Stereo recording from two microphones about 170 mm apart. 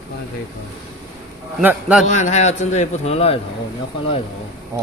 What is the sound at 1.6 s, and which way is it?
Speech, 10° right (ahead or behind).